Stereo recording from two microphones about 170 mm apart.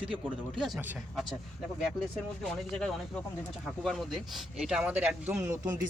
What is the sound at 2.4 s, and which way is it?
Speech, centre (ahead or behind).